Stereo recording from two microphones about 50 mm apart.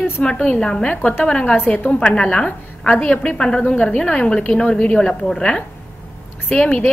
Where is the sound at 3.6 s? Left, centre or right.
Left.